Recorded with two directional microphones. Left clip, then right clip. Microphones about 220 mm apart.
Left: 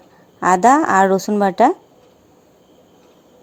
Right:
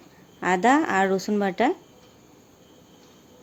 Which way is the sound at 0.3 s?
20° left (ahead or behind).